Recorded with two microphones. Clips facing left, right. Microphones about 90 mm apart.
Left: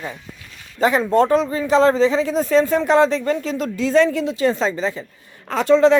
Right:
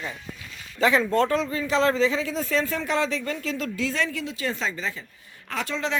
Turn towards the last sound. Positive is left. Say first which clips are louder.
# left 15 dB
turn(degrees=35)  # may be behind; listen again after turning